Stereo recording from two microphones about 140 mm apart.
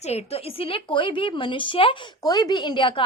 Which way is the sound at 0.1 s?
40° left (ahead or behind).